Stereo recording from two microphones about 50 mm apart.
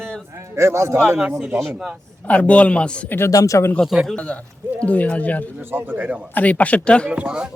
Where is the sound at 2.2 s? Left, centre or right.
Left.